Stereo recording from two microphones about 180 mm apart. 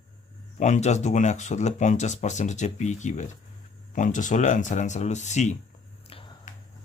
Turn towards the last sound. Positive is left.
turn(degrees=40)  # may be behind; listen again after turning